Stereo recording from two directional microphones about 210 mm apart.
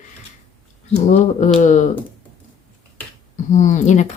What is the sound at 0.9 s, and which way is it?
Speech, 35° left (ahead or behind).